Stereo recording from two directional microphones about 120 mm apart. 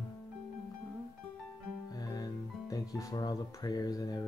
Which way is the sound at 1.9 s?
30° left (ahead or behind).